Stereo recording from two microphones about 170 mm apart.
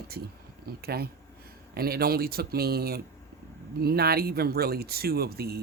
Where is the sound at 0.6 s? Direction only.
65° right (ahead or behind).